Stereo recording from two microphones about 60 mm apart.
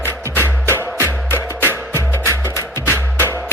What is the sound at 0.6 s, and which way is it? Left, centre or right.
Music, right.